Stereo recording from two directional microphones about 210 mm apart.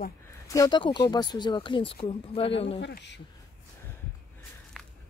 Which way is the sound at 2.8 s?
55° left (ahead or behind).